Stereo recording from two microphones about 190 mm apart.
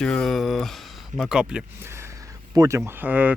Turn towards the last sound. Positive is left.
turn(degrees=-10)  # may be behind; listen again after turning